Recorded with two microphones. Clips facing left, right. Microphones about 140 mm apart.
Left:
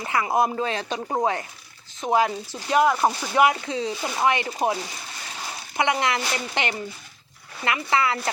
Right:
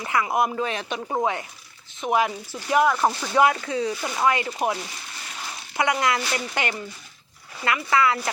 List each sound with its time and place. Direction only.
0.0 s speech: 30° left (ahead or behind)
3.5 s speech: 25° left (ahead or behind)
5.7 s speech: 25° left (ahead or behind)